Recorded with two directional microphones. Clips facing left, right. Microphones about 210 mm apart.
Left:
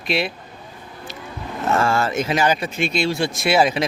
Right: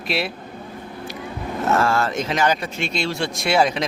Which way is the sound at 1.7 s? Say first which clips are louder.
Even; centre (ahead or behind).